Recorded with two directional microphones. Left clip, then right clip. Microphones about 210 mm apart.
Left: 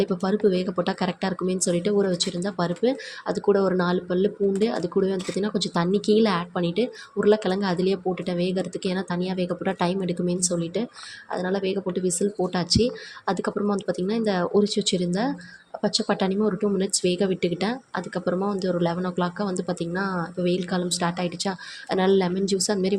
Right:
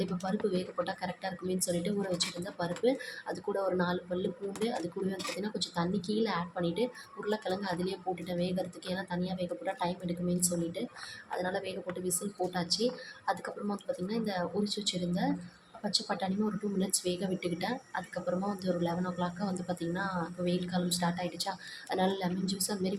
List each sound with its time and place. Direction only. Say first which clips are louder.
0.0 s speech: left 11 dB; 30° left (ahead or behind)